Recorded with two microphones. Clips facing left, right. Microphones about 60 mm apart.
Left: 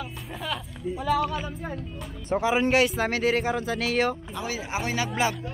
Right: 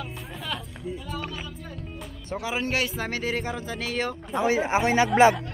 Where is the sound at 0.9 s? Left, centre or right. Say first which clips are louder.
Left 14 dB; left.